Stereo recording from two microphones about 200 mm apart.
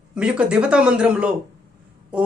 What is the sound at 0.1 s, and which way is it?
Speech, 5° right (ahead or behind).